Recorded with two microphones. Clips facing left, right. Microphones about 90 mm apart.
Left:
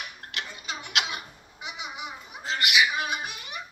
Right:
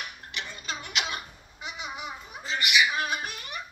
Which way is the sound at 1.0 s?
15° left (ahead or behind).